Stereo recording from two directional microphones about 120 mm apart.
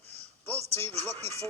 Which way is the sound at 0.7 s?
15° left (ahead or behind).